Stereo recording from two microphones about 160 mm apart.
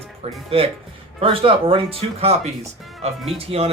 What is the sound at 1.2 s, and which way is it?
Speech, 35° right (ahead or behind).